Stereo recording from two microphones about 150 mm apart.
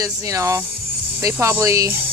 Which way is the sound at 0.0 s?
20° right (ahead or behind).